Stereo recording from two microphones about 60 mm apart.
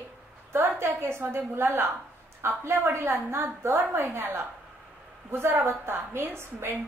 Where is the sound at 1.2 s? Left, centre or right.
Right.